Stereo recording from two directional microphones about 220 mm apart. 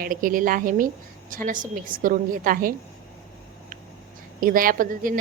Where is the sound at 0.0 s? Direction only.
40° right (ahead or behind).